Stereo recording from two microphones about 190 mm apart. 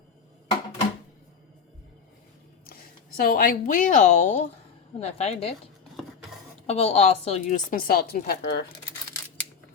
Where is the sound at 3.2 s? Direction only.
50° left (ahead or behind); by 5.5 s 35° left (ahead or behind).